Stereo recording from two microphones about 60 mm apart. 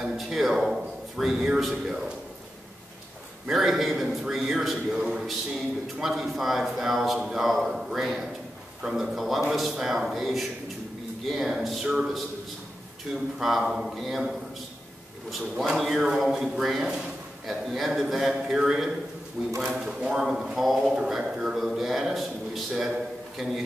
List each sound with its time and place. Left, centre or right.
0.0 s a sound: centre
3.4 s a man's voice: centre
15.3 s a man's voice: centre
19.8 s a man's voice: centre